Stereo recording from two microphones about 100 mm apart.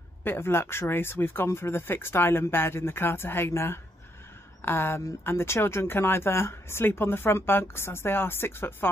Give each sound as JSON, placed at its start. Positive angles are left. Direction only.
{"t": 0.2, "sound": "speech", "side_deg": 25}